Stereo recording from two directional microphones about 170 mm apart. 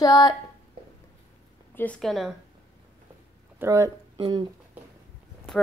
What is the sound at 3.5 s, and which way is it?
Speech, 15° right (ahead or behind).